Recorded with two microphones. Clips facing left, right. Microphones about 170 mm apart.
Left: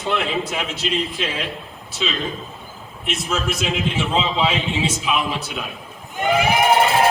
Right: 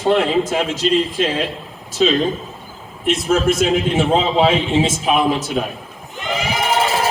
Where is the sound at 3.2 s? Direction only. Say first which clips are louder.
Right 8 dB; 45° right (ahead or behind).